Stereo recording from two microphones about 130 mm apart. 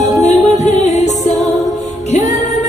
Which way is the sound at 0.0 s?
60° left (ahead or behind).